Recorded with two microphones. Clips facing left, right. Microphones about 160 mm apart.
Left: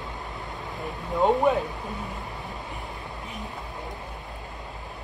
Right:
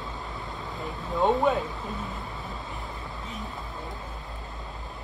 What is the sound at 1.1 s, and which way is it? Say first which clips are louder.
Speech: left 2 dB; 20° left (ahead or behind).